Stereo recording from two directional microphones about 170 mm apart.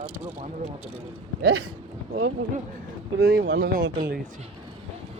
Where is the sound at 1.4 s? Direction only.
80° right.